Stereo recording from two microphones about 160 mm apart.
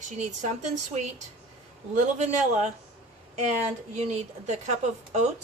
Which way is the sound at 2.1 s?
45° right (ahead or behind).